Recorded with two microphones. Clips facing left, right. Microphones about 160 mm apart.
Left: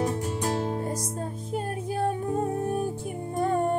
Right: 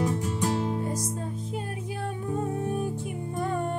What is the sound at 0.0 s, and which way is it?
Music, 45° left (ahead or behind).